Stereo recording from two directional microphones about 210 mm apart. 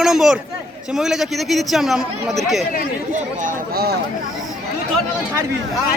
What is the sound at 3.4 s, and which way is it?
Speech, 50° right (ahead or behind).